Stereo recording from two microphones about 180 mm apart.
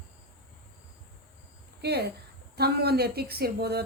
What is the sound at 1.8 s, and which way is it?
Speech, 65° right (ahead or behind).